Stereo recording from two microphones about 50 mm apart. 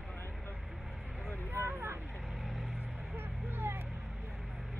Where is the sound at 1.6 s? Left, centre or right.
Right.